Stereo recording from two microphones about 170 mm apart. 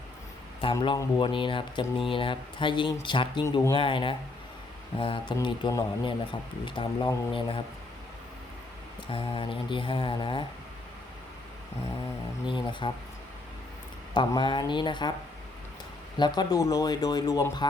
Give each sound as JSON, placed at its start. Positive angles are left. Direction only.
{"t": 0.6, "sound": "speech", "side_deg": 30}
{"t": 9.1, "sound": "speech", "side_deg": 30}
{"t": 12.5, "sound": "speech", "side_deg": 30}
{"t": 14.1, "sound": "speech", "side_deg": 25}
{"t": 16.1, "sound": "speech", "side_deg": 25}